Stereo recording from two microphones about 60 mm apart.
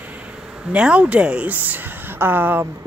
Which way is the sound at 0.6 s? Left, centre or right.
Centre.